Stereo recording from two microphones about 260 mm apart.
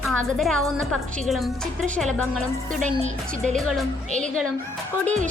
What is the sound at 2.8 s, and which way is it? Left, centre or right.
Music, right.